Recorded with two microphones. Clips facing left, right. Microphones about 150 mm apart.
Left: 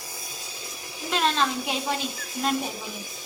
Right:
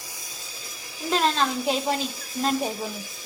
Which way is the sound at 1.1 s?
35° right (ahead or behind).